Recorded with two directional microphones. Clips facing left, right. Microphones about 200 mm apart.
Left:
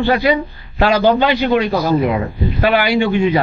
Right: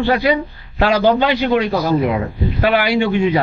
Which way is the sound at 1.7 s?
30° left (ahead or behind).